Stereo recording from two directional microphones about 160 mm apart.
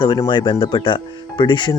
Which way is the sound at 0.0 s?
25° left (ahead or behind).